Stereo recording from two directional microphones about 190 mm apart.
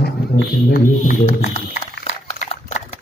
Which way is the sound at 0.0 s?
55° left (ahead or behind).